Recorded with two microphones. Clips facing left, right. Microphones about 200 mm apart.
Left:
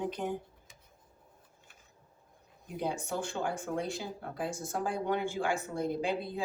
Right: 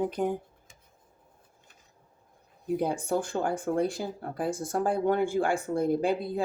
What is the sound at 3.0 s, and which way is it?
Speech, 55° right (ahead or behind).